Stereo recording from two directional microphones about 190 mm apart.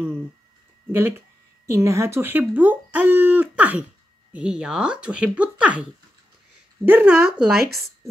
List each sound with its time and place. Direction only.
0.9 s speech: 15° right (ahead or behind)
6.9 s speech: 10° right (ahead or behind)
7.5 s speech: 55° right (ahead or behind)